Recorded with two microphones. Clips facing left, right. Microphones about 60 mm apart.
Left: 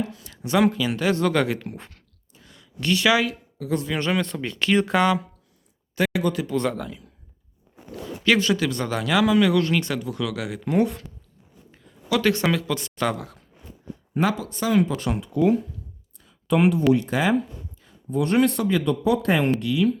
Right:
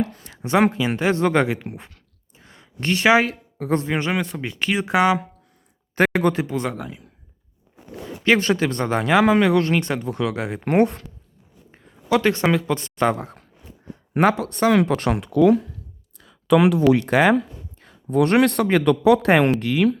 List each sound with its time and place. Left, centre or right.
0.0 s a sound: right
0.4 s speech: right
1.5 s speech: centre
2.3 s a sound: right
3.6 s speech: right
3.9 s speech: centre
5.9 s speech: right
6.5 s speech: centre
8.2 s speech: right
10.7 s speech: right
11.7 s speech: right
14.2 s speech: right
16.1 s a sound: right
16.9 s speech: right